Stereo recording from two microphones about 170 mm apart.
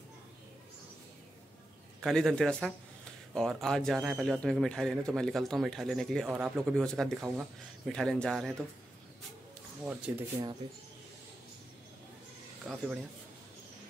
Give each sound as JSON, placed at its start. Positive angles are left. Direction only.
{"t": 2.0, "sound": "speech", "side_deg": 5}
{"t": 10.1, "sound": "speech", "side_deg": -10}
{"t": 10.6, "sound": "speech", "side_deg": -25}
{"t": 12.6, "sound": "speech", "side_deg": -5}